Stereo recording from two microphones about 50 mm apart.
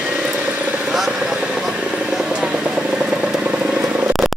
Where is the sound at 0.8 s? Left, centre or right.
Centre.